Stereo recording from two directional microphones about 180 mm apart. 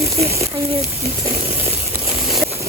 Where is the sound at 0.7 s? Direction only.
35° right (ahead or behind).